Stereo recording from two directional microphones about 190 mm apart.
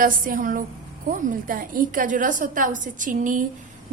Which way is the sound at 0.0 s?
45° right (ahead or behind).